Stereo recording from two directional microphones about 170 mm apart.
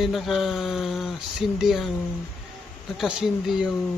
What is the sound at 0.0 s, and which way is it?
Speech, centre (ahead or behind).